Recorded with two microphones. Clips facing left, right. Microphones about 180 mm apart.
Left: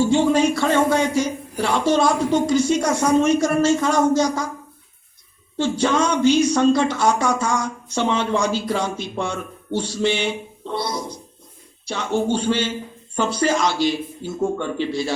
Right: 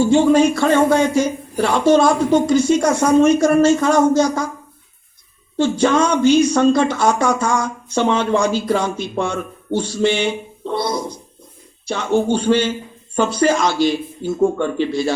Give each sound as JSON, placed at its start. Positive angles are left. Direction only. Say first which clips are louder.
{"t": 0.1, "sound": "speech", "louder": "right 4 dB", "side_deg": -50}
{"t": 5.5, "sound": "speech", "louder": "right 4 dB", "side_deg": -50}